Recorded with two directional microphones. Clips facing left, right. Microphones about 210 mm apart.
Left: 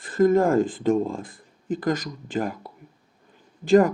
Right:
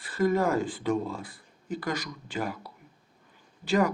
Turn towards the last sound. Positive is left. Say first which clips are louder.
# left 8 dB
turn(degrees=50)  # may be behind; listen again after turning